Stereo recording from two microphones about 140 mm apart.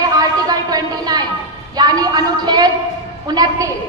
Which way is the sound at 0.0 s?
25° right (ahead or behind).